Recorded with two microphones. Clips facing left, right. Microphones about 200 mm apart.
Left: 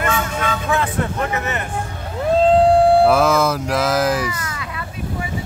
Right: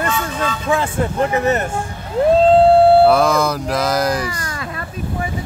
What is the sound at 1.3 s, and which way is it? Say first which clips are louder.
Speech: right 7 dB; 35° right (ahead or behind).